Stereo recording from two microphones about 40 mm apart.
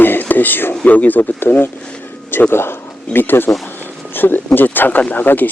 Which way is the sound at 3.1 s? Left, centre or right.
Left.